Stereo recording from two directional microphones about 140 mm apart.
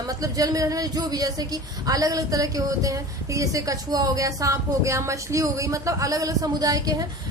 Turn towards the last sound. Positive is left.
turn(degrees=-25)  # may be behind; listen again after turning